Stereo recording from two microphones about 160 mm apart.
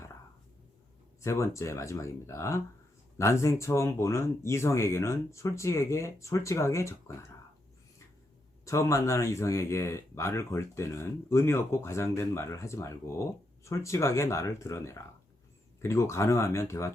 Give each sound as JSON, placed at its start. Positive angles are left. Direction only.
{"t": 1.2, "sound": "speech", "side_deg": 20}
{"t": 8.6, "sound": "speech", "side_deg": 20}